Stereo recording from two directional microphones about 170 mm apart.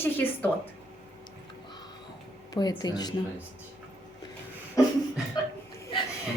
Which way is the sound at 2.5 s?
25° left (ahead or behind).